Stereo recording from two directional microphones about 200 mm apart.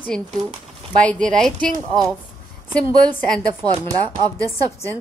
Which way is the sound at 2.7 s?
5° left (ahead or behind).